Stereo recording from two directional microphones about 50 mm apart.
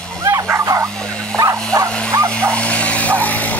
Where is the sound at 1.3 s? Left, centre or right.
Right.